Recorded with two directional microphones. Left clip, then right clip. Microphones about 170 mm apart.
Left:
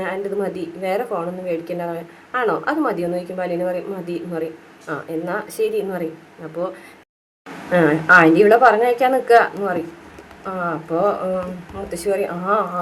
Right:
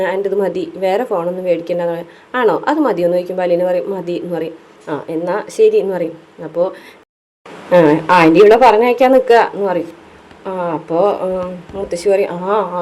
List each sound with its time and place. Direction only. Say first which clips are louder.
0.0 s a woman's voice: right 7 dB; 30° right (ahead or behind)
7.7 s a woman's voice: right 3 dB; 25° right (ahead or behind)